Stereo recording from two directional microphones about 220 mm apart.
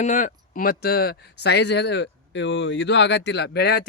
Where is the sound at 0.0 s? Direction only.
35° left (ahead or behind).